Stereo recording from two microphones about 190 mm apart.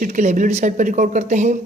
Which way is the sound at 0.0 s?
40° right (ahead or behind).